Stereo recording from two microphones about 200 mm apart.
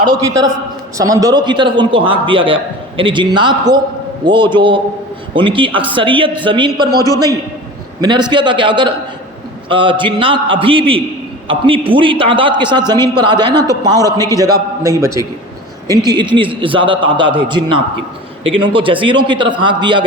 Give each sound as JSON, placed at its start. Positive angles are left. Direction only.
{"t": 0.9, "sound": "a man's voice", "side_deg": -15}
{"t": 8.0, "sound": "a man's voice", "side_deg": -20}